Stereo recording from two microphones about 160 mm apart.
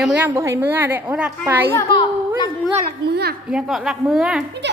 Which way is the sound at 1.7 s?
30° left (ahead or behind).